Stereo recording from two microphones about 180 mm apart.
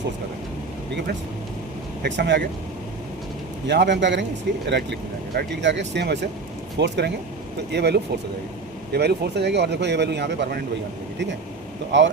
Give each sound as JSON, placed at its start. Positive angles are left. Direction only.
{"t": 2.0, "sound": "speech", "side_deg": -75}
{"t": 3.7, "sound": "speech", "side_deg": -75}
{"t": 11.9, "sound": "speech", "side_deg": -90}